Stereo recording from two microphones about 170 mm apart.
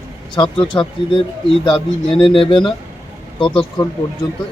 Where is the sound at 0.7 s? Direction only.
20° left (ahead or behind).